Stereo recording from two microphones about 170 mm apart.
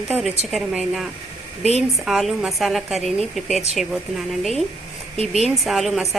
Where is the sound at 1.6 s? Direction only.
40° right (ahead or behind).